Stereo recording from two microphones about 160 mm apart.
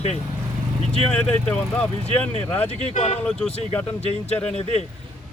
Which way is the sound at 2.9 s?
45° left (ahead or behind).